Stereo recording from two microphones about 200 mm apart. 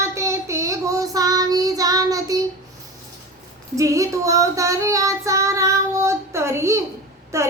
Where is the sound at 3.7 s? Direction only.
15° right (ahead or behind).